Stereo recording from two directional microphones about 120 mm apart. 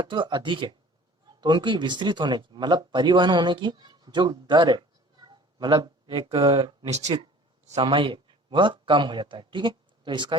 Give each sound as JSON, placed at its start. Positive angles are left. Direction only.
{"t": 0.1, "sound": "a man's voice", "side_deg": -40}